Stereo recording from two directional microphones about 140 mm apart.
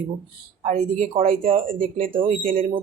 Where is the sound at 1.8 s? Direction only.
75° right (ahead or behind).